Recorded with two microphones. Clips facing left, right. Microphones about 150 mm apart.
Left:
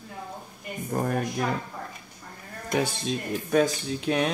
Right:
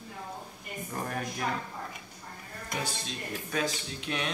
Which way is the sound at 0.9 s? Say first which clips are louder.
Left 8 dB; 45° left (ahead or behind).